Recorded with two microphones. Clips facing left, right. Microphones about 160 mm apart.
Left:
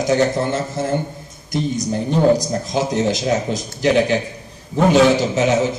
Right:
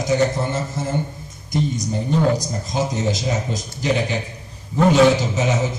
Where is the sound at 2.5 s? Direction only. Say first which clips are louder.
Left 3 dB; 75° left (ahead or behind).